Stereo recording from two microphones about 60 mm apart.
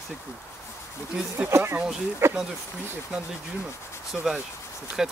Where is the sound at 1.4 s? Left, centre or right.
Right.